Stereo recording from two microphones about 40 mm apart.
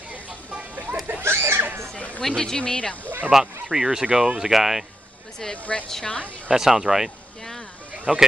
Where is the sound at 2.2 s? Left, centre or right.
Centre.